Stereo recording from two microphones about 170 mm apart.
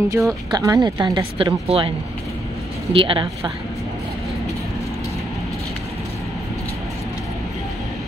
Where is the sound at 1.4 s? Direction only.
35° right (ahead or behind).